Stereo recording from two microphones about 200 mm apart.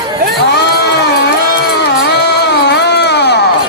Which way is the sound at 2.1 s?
55° left (ahead or behind).